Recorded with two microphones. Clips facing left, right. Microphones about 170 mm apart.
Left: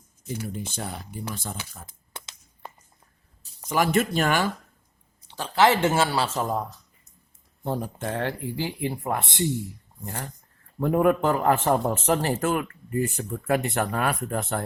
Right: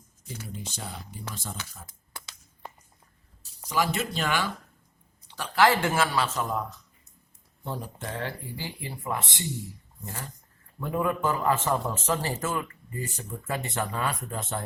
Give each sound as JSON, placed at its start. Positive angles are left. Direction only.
{"t": 0.4, "sound": "speech", "side_deg": 55}
{"t": 1.9, "sound": "a sound", "side_deg": 25}
{"t": 3.7, "sound": "speech", "side_deg": 50}
{"t": 5.3, "sound": "speech", "side_deg": 25}
{"t": 7.6, "sound": "speech", "side_deg": 50}